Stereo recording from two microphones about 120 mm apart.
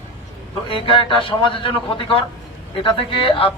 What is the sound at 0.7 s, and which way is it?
Speech, 45° left (ahead or behind).